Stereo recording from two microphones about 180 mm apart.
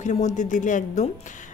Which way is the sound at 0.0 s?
40° left (ahead or behind).